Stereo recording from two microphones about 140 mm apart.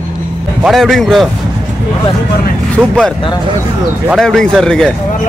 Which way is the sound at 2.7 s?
5° left (ahead or behind).